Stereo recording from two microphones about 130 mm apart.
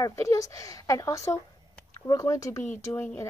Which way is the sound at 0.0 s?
25° left (ahead or behind).